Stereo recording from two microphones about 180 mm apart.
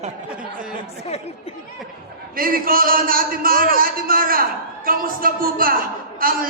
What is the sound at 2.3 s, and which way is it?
A man's voice, 55° right (ahead or behind).